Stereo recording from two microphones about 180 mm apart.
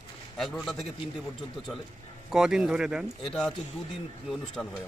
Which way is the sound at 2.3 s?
5° right (ahead or behind).